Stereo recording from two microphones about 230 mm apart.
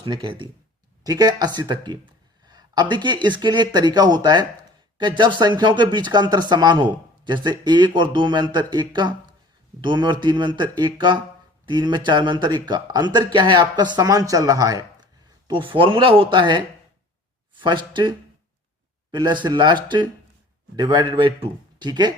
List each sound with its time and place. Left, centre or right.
0.0 s speech: right
2.5 s a sound: centre
2.9 s speech: centre
19.1 s speech: centre